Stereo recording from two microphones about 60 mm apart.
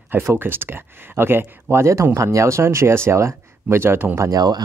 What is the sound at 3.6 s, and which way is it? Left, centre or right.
Speech, right.